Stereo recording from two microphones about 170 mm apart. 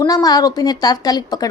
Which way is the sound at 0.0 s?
25° left (ahead or behind).